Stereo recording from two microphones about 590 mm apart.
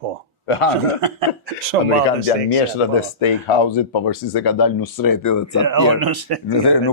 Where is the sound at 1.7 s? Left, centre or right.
Right.